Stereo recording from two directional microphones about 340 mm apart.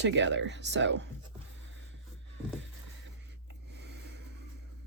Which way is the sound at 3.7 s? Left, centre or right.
Right.